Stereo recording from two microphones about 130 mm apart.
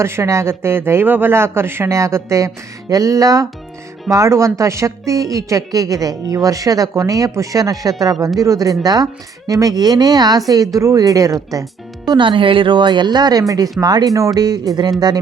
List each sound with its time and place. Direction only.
0.0 s speech: 20° right (ahead or behind)
12.0 s speech: 35° right (ahead or behind)